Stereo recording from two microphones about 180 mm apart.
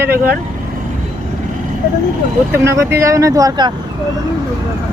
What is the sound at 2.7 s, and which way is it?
Speech, 15° right (ahead or behind).